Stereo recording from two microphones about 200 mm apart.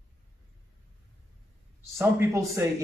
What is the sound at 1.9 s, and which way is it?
Speech, 15° right (ahead or behind).